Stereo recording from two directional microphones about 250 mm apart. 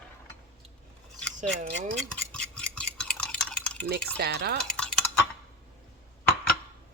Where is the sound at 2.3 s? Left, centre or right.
Centre.